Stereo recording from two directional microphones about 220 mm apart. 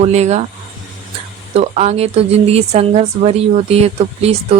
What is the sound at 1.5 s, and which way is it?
Speech, 30° right (ahead or behind).